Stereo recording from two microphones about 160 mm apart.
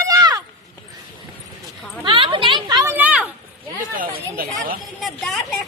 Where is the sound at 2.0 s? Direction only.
30° right (ahead or behind).